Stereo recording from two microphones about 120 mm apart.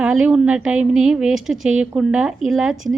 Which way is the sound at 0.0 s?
5° right (ahead or behind).